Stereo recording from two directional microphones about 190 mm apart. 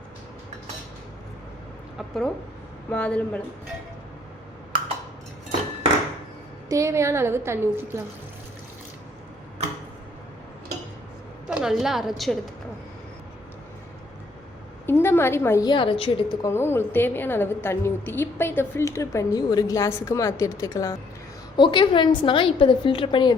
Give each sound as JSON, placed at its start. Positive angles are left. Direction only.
{"t": 2.0, "sound": "a woman's voice", "side_deg": 0}
{"t": 6.7, "sound": "a woman's voice", "side_deg": -15}
{"t": 11.4, "sound": "a woman's voice", "side_deg": -5}
{"t": 14.8, "sound": "a woman's voice", "side_deg": 10}
{"t": 16.5, "sound": "a woman's voice", "side_deg": 10}